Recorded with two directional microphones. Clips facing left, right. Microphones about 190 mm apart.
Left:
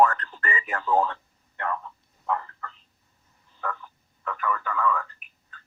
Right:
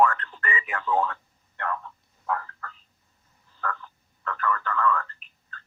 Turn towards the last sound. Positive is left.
turn(degrees=10)  # may be behind; listen again after turning